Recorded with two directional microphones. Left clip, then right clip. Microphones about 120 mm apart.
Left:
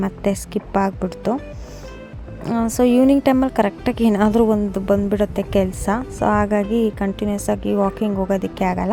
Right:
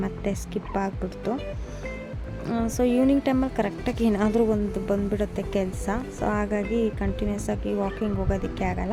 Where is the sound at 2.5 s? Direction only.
45° left (ahead or behind).